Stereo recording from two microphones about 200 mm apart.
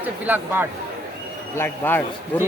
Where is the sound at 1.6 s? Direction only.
10° left (ahead or behind).